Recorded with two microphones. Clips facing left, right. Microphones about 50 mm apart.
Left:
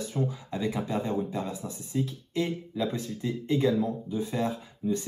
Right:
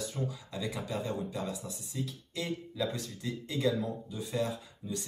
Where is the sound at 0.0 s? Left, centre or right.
Left.